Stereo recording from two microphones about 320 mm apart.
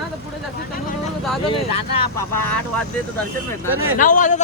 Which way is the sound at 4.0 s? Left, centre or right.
Left.